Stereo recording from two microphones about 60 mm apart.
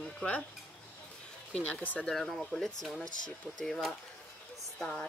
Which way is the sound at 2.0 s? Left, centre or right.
Centre.